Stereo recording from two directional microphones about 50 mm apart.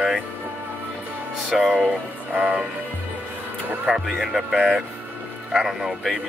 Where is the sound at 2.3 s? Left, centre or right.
Right.